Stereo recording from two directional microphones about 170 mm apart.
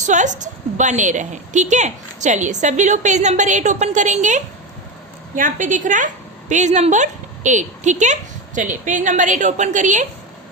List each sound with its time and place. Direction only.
0.0 s a woman's voice: 45° right (ahead or behind)